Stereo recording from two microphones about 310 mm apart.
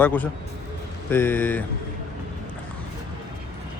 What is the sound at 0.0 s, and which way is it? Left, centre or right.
Speech, centre.